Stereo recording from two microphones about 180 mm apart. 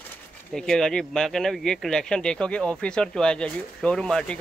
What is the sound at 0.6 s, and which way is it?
Speech, 5° left (ahead or behind).